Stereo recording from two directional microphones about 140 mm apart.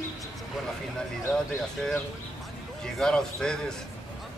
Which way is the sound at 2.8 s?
5° left (ahead or behind).